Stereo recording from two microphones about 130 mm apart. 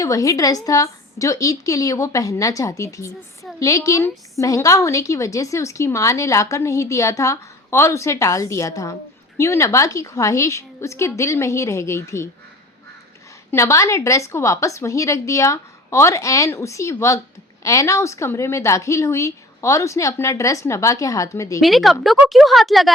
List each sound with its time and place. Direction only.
0.0 s a woman's voice: 25° left (ahead or behind)
13.5 s a woman's voice: 20° left (ahead or behind)
21.6 s speech: centre (ahead or behind)